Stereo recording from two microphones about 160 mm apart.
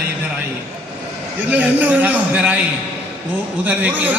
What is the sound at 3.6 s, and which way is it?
Speech, 10° right (ahead or behind).